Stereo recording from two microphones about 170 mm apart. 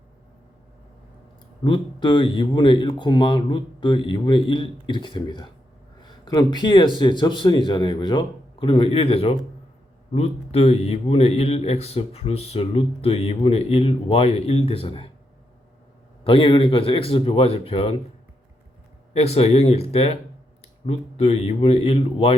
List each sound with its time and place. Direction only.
1.6 s speech: 30° left (ahead or behind)
16.2 s speech: 30° left (ahead or behind)
19.1 s speech: 35° left (ahead or behind)